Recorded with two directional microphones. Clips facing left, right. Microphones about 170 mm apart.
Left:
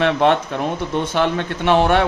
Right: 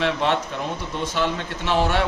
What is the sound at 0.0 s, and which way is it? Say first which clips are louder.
Speech: left 6 dB; 60° left (ahead or behind).